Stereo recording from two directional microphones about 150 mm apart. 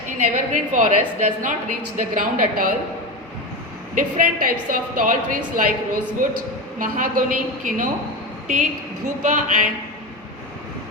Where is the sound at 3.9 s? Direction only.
70° right (ahead or behind).